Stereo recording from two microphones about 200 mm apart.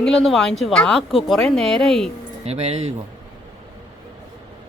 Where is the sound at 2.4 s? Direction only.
30° right (ahead or behind).